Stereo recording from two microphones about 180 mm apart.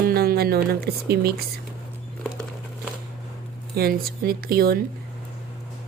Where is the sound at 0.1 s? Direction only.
60° right (ahead or behind).